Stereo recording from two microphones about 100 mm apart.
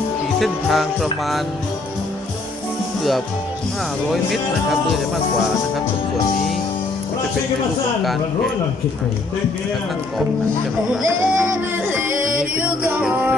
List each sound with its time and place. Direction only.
0.4 s music: centre (ahead or behind)
4.1 s music: centre (ahead or behind)
11.1 s music: 20° right (ahead or behind)